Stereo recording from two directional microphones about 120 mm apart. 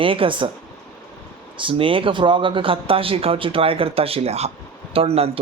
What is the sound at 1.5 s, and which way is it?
Speech, 45° right (ahead or behind).